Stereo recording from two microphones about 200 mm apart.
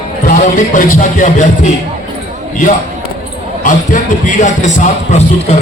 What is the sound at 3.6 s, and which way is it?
A man's voice, 40° left (ahead or behind).